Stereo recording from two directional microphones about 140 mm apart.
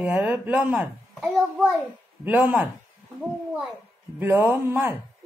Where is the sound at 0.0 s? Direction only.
10° right (ahead or behind).